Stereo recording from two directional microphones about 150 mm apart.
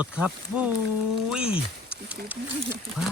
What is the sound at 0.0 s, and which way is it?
Speech, 10° right (ahead or behind).